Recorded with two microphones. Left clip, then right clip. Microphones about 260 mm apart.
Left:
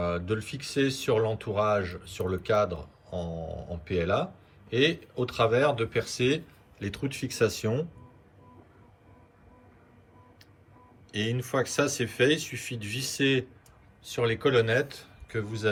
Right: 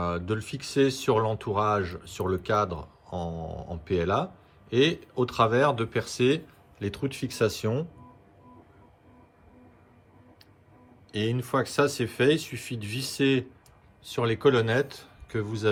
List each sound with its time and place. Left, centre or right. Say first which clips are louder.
0.3 s speech: even; centre
11.1 s speech: right 2 dB; centre